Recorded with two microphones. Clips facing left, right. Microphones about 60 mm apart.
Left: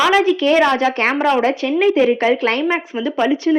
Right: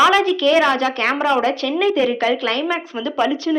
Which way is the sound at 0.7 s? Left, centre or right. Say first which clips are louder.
Left 2 dB; left.